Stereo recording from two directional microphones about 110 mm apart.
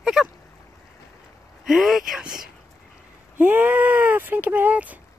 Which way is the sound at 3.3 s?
15° right (ahead or behind).